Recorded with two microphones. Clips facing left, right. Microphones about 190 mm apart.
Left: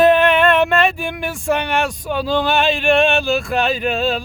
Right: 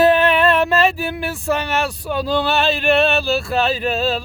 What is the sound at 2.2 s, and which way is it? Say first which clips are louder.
Speech: left 1 dB; 35° right (ahead or behind).